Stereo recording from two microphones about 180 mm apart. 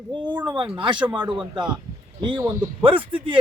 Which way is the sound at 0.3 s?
25° right (ahead or behind).